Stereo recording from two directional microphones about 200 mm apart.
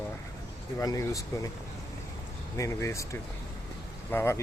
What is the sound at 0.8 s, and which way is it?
Speech, 15° left (ahead or behind).